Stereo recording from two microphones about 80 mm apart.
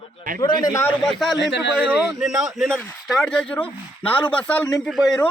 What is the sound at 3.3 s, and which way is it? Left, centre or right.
A man's voice, centre.